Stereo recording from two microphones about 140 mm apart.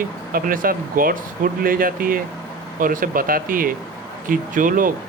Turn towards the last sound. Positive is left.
turn(degrees=-75)  # may be behind; listen again after turning